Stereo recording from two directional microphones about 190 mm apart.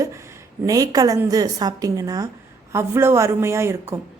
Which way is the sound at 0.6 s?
20° right (ahead or behind).